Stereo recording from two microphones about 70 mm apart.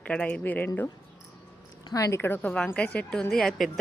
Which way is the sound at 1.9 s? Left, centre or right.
Left.